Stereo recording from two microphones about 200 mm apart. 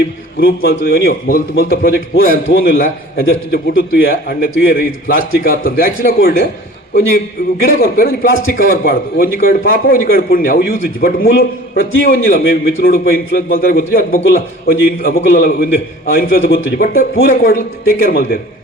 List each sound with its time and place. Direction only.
0.3 s a man's voice: 50° left (ahead or behind)
7.6 s a man's voice: 45° left (ahead or behind)
16.2 s a man's voice: 75° left (ahead or behind)
16.7 s a man's voice: 45° left (ahead or behind)